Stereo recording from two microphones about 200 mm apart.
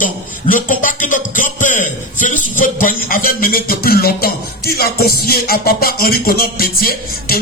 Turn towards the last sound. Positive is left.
turn(degrees=50)  # may be behind; listen again after turning